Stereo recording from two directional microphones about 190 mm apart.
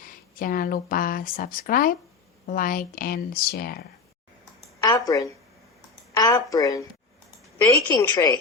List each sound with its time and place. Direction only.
0.0 s speech: 50° left (ahead or behind)
4.8 s a sound: 20° left (ahead or behind)
6.1 s a woman's voice: 15° left (ahead or behind)